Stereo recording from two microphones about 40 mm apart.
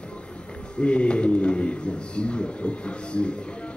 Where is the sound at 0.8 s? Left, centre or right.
Left.